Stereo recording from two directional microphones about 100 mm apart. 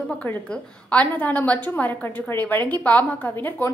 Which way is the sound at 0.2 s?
15° left (ahead or behind).